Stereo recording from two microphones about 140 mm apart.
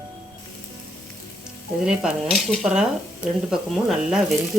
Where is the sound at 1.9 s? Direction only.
Centre (ahead or behind).